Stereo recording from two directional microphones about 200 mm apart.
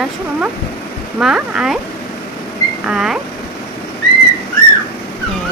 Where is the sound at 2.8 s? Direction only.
5° right (ahead or behind).